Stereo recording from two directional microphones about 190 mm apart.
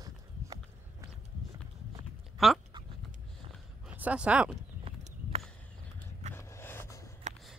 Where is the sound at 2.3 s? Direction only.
Centre (ahead or behind).